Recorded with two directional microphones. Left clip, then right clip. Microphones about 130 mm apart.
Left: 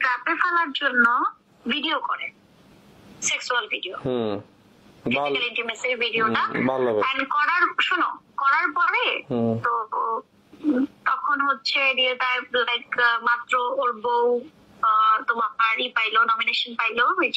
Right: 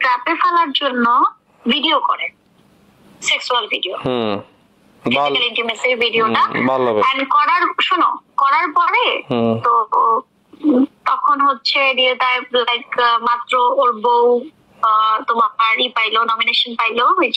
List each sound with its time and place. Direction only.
0.0 s speech: 50° right (ahead or behind)
4.0 s speech: 15° right (ahead or behind)
5.0 s speech: 50° right (ahead or behind)
6.7 s speech: 25° right (ahead or behind)
7.0 s speech: 45° right (ahead or behind)
9.3 s speech: 20° right (ahead or behind)
9.6 s speech: 40° right (ahead or behind)
10.6 s speech: 50° right (ahead or behind)